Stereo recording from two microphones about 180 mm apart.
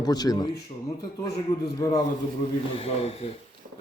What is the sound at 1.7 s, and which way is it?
Speech, 20° left (ahead or behind).